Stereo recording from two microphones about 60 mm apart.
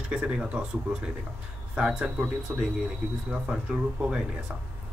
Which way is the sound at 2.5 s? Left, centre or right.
Centre.